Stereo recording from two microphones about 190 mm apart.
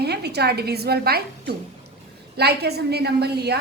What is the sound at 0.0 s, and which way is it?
A woman's voice, 60° right (ahead or behind).